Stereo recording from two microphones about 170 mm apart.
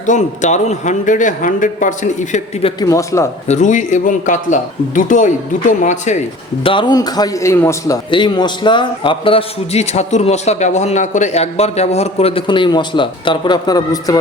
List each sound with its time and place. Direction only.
0.0 s speech: 45° left (ahead or behind)
2.8 s a man's voice: 20° left (ahead or behind)
3.4 s speech: 45° left (ahead or behind)
6.7 s a man's voice: 25° left (ahead or behind)
8.1 s a man's voice: 25° left (ahead or behind)